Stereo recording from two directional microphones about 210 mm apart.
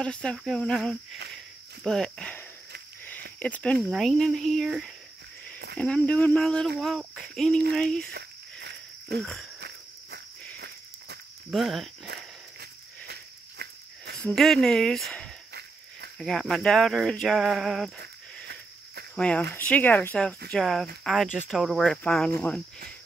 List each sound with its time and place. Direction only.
0.0 s speech: 5° left (ahead or behind)
1.3 s cricket: centre (ahead or behind)
3.3 s speech: 5° left (ahead or behind)
8.1 s a sound: 50° right (ahead or behind)
9.2 s speech: 5° left (ahead or behind)
9.6 s cricket: 50° right (ahead or behind)
11.5 s speech: centre (ahead or behind)
12.1 s a sound: 50° right (ahead or behind)
14.2 s speech: centre (ahead or behind)
19.1 s speech: 5° left (ahead or behind)